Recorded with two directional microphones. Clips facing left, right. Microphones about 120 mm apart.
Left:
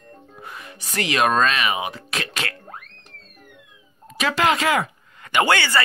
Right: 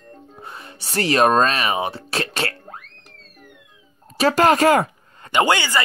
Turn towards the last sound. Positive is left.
turn(degrees=-20)  # may be behind; listen again after turning